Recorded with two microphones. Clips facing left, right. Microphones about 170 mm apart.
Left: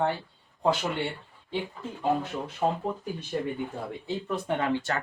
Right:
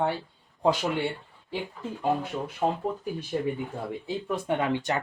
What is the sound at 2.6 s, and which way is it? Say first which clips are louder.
Speech: even; 10° right (ahead or behind).